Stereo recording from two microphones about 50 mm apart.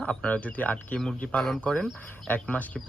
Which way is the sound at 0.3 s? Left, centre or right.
Left.